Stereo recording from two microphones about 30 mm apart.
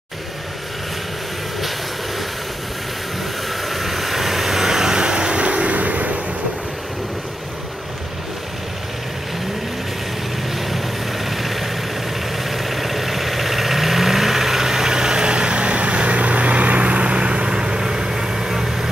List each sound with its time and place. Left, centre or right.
3.6 s vehicle: centre; by 5.4 s right
5.4 s vehicle: right
5.8 s waves: right
11.2 s vehicle: centre